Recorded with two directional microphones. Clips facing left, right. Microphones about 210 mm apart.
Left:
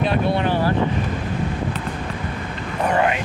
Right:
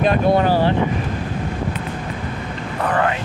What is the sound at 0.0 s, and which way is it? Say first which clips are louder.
Speech: right 4 dB; 45° right (ahead or behind).